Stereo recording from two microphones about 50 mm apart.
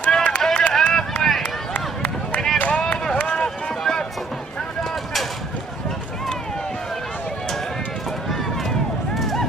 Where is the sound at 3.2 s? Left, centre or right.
Centre.